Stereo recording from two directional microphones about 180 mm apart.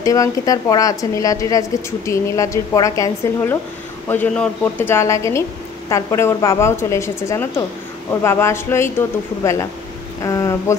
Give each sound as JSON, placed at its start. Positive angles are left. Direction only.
{"t": 0.0, "sound": "a woman's voice", "side_deg": 20}
{"t": 4.1, "sound": "a woman's voice", "side_deg": 10}